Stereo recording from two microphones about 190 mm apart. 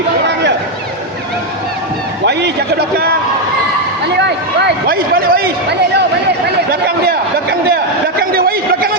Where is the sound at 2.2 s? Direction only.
65° right (ahead or behind).